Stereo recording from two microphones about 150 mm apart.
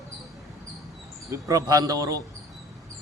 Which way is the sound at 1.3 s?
25° right (ahead or behind).